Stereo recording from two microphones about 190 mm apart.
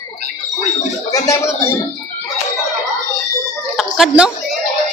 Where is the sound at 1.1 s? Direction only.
15° left (ahead or behind).